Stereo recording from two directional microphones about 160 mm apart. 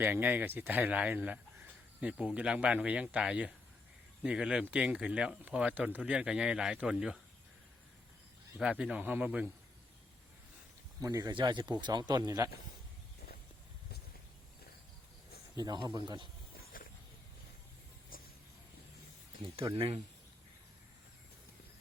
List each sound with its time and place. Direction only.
0.0 s speech: 10° right (ahead or behind)
8.5 s speech: 5° right (ahead or behind)
11.0 s speech: 20° right (ahead or behind)
15.5 s speech: 25° right (ahead or behind)
18.1 s a sound: 65° left (ahead or behind)
19.7 s speech: 35° right (ahead or behind)